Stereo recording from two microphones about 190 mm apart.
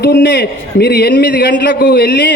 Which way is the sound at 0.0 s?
60° left (ahead or behind).